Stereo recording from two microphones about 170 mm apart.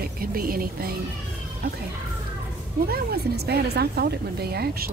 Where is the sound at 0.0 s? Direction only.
60° right (ahead or behind).